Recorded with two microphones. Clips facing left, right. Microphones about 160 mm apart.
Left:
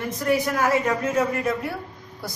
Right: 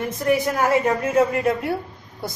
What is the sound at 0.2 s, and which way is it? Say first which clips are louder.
A woman's voice: right 2 dB; 30° right (ahead or behind).